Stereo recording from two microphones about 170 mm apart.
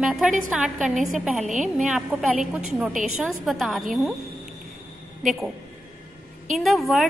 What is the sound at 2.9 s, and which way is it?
Speech, 50° right (ahead or behind).